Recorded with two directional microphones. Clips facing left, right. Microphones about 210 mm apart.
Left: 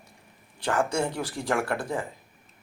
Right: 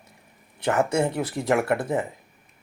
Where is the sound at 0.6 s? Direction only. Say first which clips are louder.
Right 4 dB; 20° right (ahead or behind).